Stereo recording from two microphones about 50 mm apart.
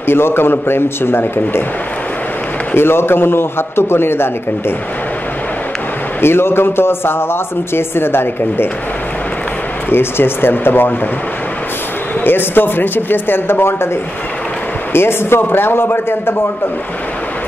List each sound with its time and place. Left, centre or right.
0.0 s a man's voice: left
2.7 s a man's voice: left
6.2 s a man's voice: left
9.8 s a man's voice: left
12.3 s a man's voice: left
14.9 s a man's voice: left